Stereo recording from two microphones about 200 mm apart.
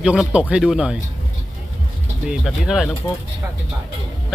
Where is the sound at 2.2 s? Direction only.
5° right (ahead or behind).